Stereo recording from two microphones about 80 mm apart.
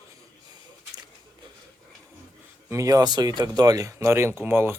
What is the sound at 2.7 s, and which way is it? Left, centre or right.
Speech, right.